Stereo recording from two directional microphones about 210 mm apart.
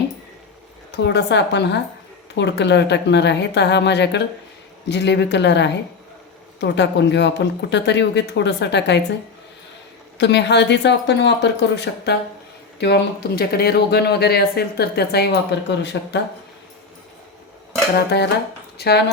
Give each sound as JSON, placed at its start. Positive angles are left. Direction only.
{"t": 0.9, "sound": "speech", "side_deg": 50}
{"t": 10.2, "sound": "speech", "side_deg": 55}
{"t": 18.8, "sound": "speech", "side_deg": 50}